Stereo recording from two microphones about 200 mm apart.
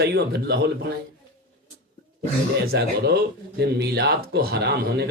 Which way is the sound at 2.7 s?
55° right (ahead or behind).